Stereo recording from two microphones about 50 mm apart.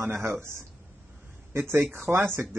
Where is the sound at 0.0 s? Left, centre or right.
Right.